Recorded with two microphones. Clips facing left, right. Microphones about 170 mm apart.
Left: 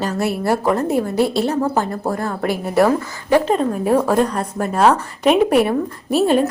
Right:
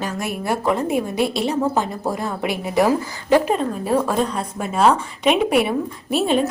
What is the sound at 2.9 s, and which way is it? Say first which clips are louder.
Speech: even; 10° right (ahead or behind).